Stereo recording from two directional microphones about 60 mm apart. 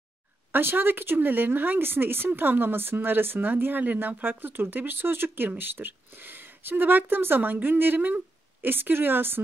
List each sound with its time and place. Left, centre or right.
0.5 s speech: right